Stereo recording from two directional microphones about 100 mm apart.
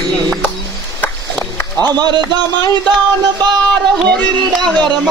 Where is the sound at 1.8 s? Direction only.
45° right (ahead or behind).